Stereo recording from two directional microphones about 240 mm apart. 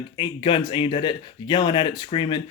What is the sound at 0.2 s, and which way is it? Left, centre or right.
Speech, left.